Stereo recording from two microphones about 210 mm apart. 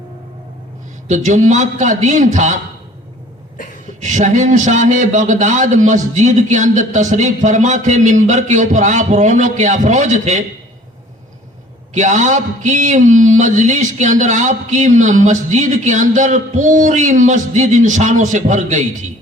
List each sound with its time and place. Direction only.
1.0 s a man's voice: 35° right (ahead or behind)
4.0 s a man's voice: 35° right (ahead or behind)
11.9 s a man's voice: 35° right (ahead or behind)